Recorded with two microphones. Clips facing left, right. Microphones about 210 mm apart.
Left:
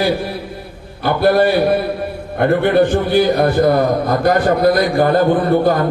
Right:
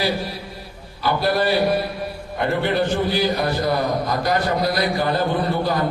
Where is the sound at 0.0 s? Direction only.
55° left (ahead or behind).